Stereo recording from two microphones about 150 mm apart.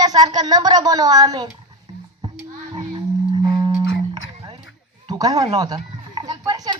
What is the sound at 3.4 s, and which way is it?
Music, 30° right (ahead or behind).